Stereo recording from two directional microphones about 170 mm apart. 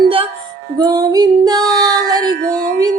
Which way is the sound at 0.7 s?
20° right (ahead or behind).